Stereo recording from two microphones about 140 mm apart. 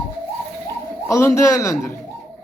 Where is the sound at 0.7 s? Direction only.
20° left (ahead or behind).